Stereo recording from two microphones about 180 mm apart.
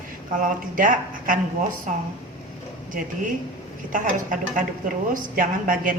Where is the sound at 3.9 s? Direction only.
45° right (ahead or behind).